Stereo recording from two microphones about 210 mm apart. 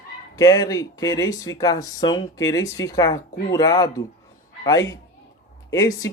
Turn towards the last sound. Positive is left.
turn(degrees=15)  # may be behind; listen again after turning